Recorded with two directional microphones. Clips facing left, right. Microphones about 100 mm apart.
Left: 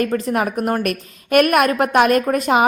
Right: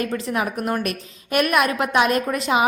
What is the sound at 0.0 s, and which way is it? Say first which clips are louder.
A woman's voice: left 5 dB; 45° left (ahead or behind).